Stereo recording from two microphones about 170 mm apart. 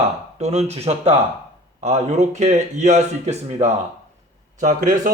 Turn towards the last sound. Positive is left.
turn(degrees=-50)  # may be behind; listen again after turning